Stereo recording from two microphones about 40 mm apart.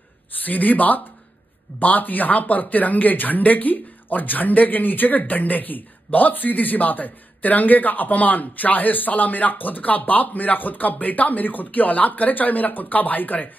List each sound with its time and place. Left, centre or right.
0.4 s a man's voice: left